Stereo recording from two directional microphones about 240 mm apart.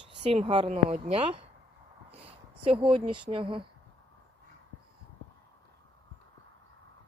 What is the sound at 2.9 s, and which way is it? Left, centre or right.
Speech, right.